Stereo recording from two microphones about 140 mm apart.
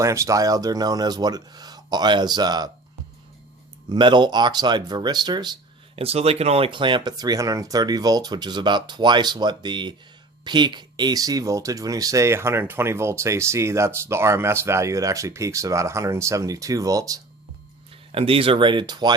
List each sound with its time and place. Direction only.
0.0 s speech: 20° right (ahead or behind)
3.8 s speech: 35° right (ahead or behind)
6.0 s speech: 45° right (ahead or behind); by 17.2 s 25° right (ahead or behind)
18.1 s speech: 40° right (ahead or behind)